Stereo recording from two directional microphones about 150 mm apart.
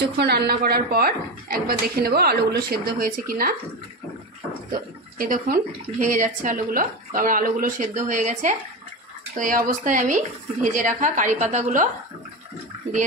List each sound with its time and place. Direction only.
0.0 s a woman's voice: 90° right
5.2 s speech: 65° right (ahead or behind)